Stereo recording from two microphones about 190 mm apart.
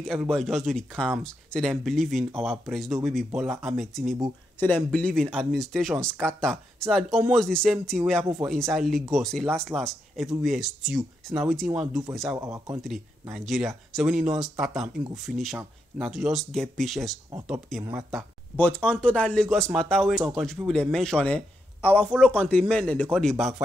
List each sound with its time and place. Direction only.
0.0 s speech: 5° left (ahead or behind)
12.4 s speech: 15° right (ahead or behind)
13.3 s speech: centre (ahead or behind)